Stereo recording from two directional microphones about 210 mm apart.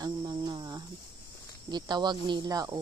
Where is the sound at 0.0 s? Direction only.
20° right (ahead or behind).